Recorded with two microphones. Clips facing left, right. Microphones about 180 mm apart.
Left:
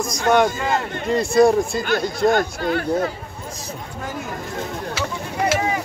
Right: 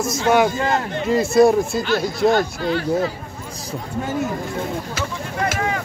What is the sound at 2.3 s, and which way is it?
Speech, 50° left (ahead or behind).